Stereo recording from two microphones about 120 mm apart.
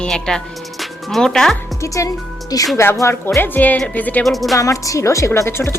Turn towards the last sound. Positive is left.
turn(degrees=20)  # may be behind; listen again after turning